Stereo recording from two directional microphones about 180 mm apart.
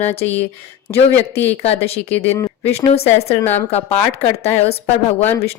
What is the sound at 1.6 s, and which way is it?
Speech, 35° left (ahead or behind).